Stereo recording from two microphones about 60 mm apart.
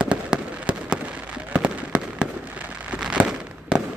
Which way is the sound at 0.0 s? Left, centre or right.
Centre.